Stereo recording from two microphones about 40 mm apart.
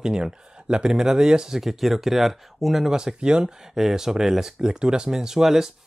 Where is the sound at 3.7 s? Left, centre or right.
Centre.